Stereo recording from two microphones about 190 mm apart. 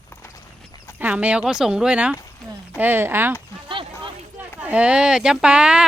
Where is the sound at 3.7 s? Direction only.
25° right (ahead or behind).